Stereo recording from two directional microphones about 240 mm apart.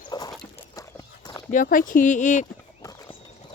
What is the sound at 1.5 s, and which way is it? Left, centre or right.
Speech, left.